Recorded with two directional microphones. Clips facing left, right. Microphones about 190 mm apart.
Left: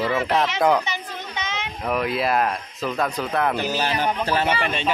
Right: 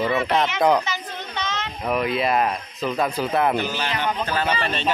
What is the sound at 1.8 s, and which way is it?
A man's voice, centre (ahead or behind).